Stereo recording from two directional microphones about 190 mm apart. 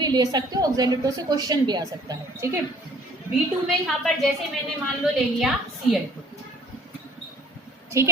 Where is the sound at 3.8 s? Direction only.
Centre (ahead or behind).